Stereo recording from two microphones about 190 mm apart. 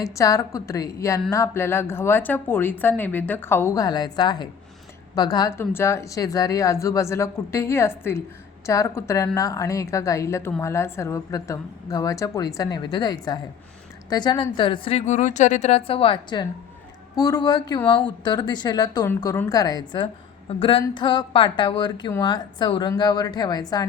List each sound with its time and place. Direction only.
0.0 s a woman's voice: 15° left (ahead or behind)